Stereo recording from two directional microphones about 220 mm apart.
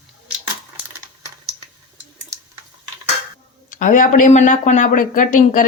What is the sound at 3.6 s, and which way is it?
Speech, 35° left (ahead or behind).